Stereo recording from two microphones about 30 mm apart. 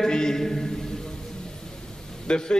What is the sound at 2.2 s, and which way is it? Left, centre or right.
Speech, left.